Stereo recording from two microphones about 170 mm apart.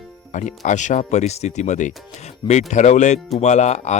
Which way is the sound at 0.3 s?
45° left (ahead or behind).